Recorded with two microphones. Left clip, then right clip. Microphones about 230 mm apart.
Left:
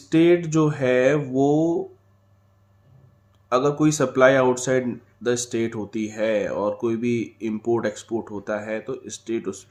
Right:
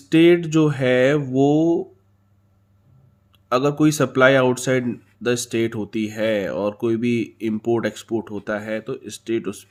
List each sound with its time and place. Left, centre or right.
0.1 s speech: right
3.5 s speech: right